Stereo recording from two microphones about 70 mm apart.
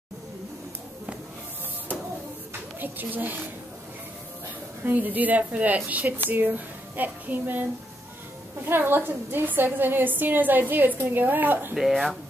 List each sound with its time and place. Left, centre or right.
2.8 s speech: right
4.8 s a woman's voice: right
8.6 s a woman's voice: right
11.7 s speech: centre